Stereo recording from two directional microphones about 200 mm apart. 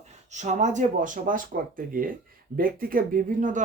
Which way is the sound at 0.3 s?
35° right (ahead or behind).